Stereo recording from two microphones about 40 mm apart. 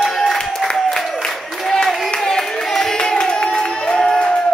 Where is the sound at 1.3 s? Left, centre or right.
Centre.